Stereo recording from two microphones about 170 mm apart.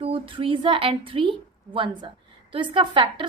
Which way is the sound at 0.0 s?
30° right (ahead or behind).